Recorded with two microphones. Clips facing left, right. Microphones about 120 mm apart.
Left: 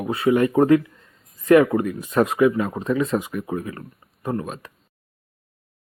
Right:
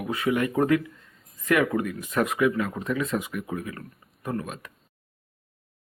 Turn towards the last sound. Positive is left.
turn(degrees=30)  # may be behind; listen again after turning